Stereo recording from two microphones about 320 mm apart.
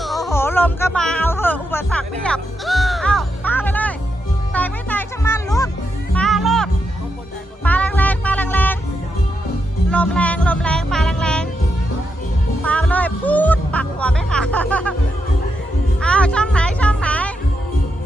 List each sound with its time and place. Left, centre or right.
0.0 s music: centre
9.9 s music: centre
12.6 s music: centre
16.0 s music: centre